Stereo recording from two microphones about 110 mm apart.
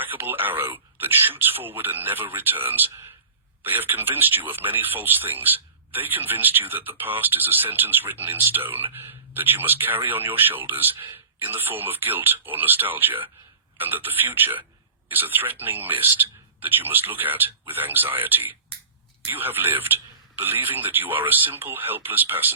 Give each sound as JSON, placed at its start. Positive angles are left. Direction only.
{"t": 0.0, "sound": "speech", "side_deg": -20}